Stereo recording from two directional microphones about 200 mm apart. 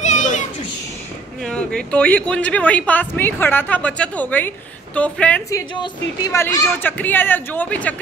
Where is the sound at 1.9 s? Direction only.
5° left (ahead or behind).